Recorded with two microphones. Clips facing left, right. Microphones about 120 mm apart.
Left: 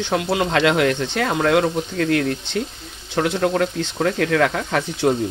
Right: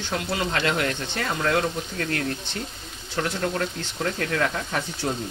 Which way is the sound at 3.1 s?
60° left (ahead or behind).